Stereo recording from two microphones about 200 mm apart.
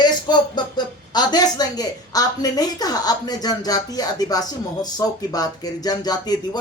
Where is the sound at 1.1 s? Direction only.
20° left (ahead or behind).